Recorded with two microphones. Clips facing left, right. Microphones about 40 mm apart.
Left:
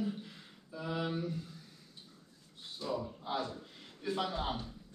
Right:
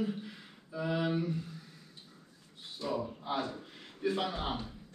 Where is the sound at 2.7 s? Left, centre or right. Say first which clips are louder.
Right 2 dB; centre.